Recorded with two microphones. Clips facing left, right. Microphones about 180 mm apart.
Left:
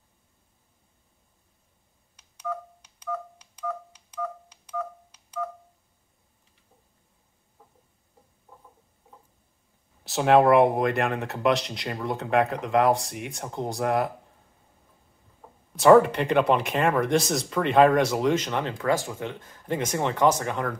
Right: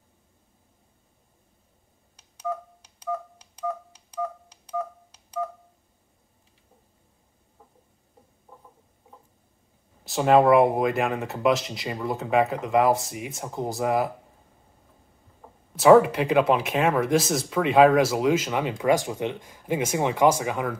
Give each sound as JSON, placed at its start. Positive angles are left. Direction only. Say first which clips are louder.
{"t": 2.5, "sound": "telephone dialing", "louder": "right 2 dB", "side_deg": -30}
{"t": 10.0, "sound": "speech", "louder": "right 1 dB", "side_deg": 0}
{"t": 15.7, "sound": "speech", "louder": "right 1 dB", "side_deg": 0}